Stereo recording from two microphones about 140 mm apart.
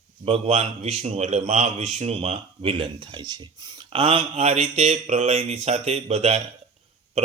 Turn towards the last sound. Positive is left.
turn(degrees=-50)  # may be behind; listen again after turning